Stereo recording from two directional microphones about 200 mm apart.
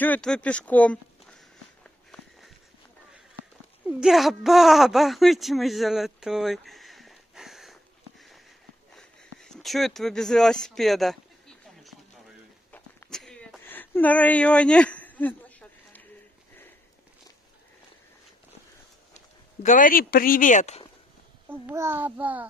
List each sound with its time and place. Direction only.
0.0 s speech: 5° left (ahead or behind)
1.8 s walk: centre (ahead or behind)
4.0 s speech: centre (ahead or behind)
8.9 s a sound: centre (ahead or behind)
19.1 s speech: 40° left (ahead or behind)
21.5 s a child's voice: 10° right (ahead or behind)